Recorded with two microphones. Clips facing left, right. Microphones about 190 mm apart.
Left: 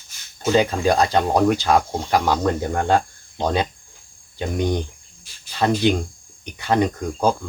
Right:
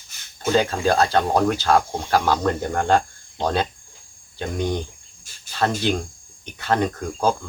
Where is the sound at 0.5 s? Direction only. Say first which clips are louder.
Left 1 dB; 15° left (ahead or behind).